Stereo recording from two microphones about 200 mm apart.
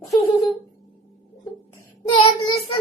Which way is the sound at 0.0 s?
15° left (ahead or behind).